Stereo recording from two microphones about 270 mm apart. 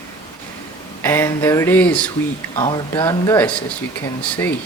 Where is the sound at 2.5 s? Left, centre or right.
Centre.